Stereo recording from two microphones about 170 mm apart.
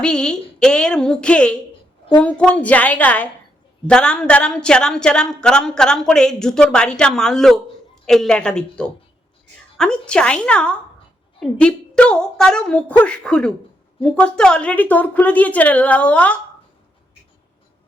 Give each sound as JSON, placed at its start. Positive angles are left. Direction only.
{"t": 0.0, "sound": "a woman's voice", "side_deg": 5}